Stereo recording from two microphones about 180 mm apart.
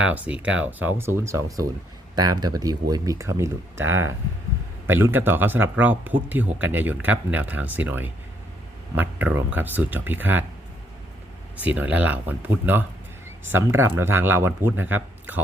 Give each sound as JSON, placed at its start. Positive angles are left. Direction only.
{"t": 0.0, "sound": "speech", "side_deg": -10}
{"t": 11.6, "sound": "speech", "side_deg": -10}
{"t": 13.9, "sound": "speech", "side_deg": -10}